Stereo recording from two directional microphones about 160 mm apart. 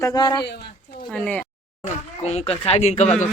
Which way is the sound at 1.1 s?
5° left (ahead or behind).